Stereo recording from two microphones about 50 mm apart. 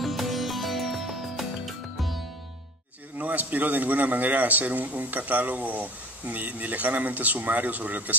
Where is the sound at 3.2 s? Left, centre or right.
Right.